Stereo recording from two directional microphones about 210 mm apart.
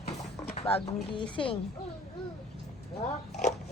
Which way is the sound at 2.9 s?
30° left (ahead or behind).